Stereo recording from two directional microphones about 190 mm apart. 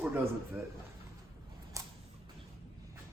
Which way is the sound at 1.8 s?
15° right (ahead or behind).